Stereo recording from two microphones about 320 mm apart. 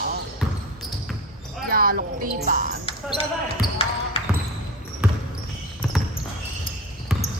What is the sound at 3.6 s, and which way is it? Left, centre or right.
Basketball bounce, centre.